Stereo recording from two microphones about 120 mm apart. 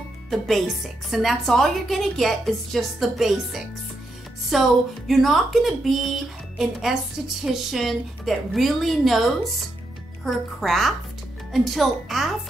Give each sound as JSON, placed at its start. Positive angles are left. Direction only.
{"t": 0.3, "sound": "speech", "side_deg": 0}